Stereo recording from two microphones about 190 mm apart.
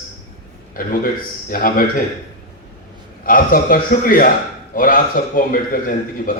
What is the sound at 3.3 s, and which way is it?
A man's voice, 50° left (ahead or behind).